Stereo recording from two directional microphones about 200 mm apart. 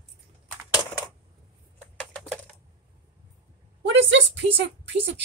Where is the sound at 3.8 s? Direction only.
65° right (ahead or behind).